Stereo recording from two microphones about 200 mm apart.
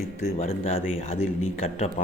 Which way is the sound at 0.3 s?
30° left (ahead or behind).